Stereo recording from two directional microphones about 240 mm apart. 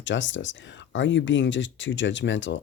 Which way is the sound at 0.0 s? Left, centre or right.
Left.